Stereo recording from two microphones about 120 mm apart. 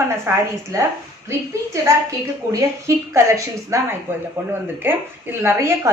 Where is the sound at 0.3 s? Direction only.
20° right (ahead or behind).